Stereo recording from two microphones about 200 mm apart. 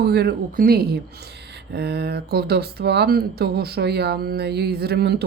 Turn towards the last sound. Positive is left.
turn(degrees=-55)  # may be behind; listen again after turning